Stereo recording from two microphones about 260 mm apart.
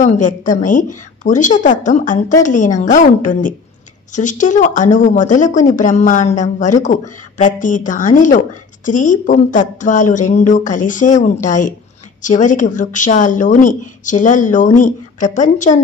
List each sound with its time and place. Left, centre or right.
0.0 s speech: left